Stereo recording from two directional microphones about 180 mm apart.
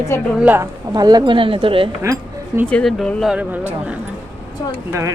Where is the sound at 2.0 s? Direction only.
15° right (ahead or behind).